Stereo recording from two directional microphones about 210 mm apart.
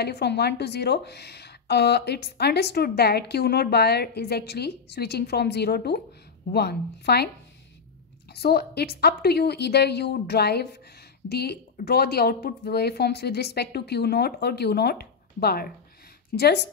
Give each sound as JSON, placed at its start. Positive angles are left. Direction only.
{"t": 0.0, "sound": "a woman's voice", "side_deg": 50}
{"t": 8.3, "sound": "a woman's voice", "side_deg": 50}